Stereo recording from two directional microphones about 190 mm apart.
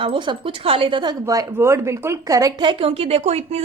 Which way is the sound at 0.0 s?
25° right (ahead or behind).